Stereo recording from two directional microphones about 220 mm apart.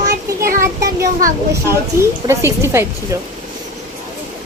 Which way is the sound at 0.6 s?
15° right (ahead or behind).